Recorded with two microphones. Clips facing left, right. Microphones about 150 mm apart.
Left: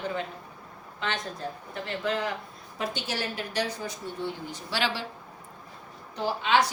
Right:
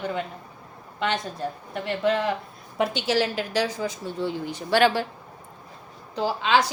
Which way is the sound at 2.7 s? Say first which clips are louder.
Right 9 dB; 80° right.